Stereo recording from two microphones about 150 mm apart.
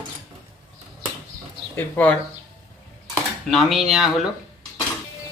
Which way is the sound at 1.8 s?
10° left (ahead or behind).